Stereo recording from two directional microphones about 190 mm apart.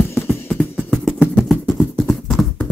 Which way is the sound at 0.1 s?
5° left (ahead or behind).